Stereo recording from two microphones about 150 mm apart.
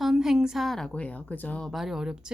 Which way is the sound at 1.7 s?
Centre (ahead or behind).